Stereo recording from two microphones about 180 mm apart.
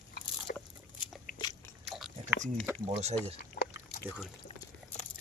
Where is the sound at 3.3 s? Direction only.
55° left (ahead or behind).